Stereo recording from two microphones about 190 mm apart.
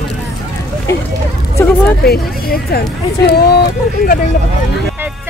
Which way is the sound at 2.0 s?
55° left (ahead or behind).